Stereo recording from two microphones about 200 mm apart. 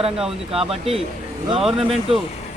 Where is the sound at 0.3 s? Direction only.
30° right (ahead or behind).